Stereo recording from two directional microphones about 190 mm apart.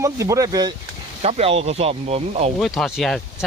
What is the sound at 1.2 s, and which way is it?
Speech, 35° right (ahead or behind).